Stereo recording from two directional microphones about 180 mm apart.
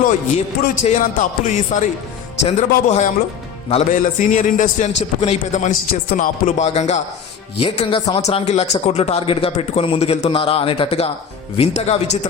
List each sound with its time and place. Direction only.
0.0 s a man's voice: 40° left (ahead or behind)
5.9 s a man's voice: 55° left (ahead or behind); by 12.3 s 35° left (ahead or behind)